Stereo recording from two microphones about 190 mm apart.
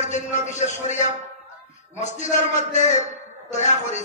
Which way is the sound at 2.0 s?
40° left (ahead or behind).